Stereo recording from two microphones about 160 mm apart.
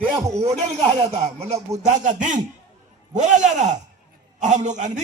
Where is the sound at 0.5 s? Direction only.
40° right (ahead or behind).